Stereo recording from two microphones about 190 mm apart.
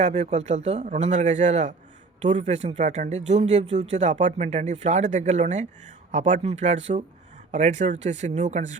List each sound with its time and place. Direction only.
0.0 s speech: 35° right (ahead or behind)